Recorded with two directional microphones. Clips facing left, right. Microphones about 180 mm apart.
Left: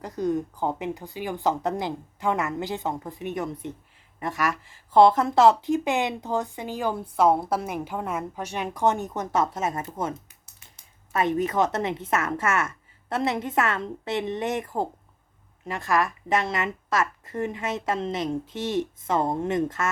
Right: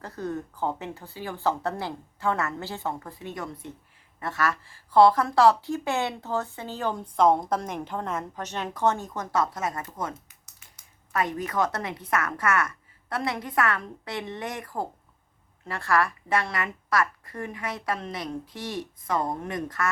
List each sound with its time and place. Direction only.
0.0 s a woman's voice: 15° left (ahead or behind)